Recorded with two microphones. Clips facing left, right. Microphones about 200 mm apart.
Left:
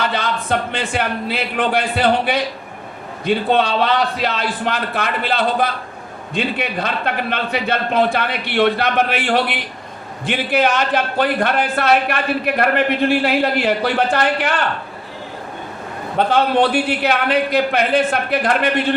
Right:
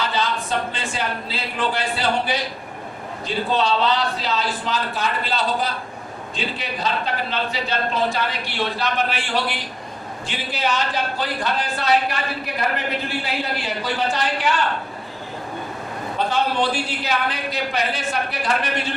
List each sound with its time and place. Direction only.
0.1 s a man's voice: 65° left (ahead or behind)
16.1 s a man's voice: 60° left (ahead or behind)